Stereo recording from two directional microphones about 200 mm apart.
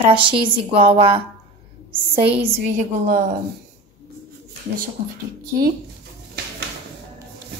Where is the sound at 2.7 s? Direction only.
40° right (ahead or behind).